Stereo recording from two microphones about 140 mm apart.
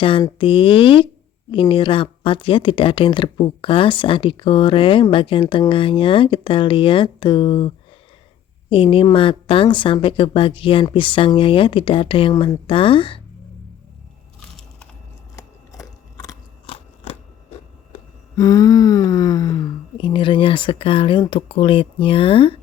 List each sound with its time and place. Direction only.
0.0 s speech: 40° left (ahead or behind)
8.7 s speech: 40° left (ahead or behind)
15.4 s biting: 25° left (ahead or behind)
16.6 s scissors: 50° left (ahead or behind)
18.3 s speech: 25° left (ahead or behind)